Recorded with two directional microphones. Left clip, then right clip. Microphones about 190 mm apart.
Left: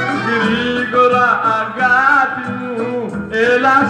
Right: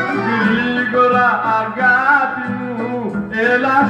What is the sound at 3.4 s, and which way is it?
Music, 50° left (ahead or behind).